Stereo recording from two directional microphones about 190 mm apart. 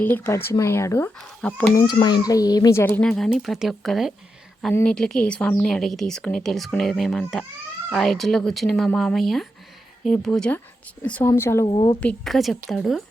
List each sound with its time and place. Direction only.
0.0 s speech: 10° left (ahead or behind)
1.7 s a child's voice: 20° left (ahead or behind)
11.6 s a child's voice: 25° left (ahead or behind)
11.9 s a woman's voice: 5° left (ahead or behind)